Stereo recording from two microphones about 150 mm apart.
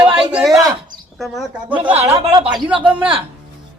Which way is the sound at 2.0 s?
45° right (ahead or behind).